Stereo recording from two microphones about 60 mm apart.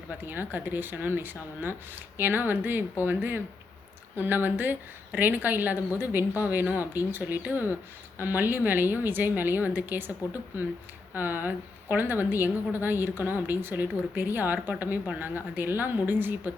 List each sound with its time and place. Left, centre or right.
0.3 s a woman's voice: right
11.1 s a woman's voice: right